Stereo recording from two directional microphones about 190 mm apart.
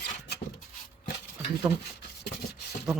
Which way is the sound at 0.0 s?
50° left (ahead or behind).